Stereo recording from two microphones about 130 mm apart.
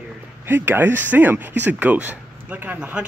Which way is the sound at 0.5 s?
15° right (ahead or behind).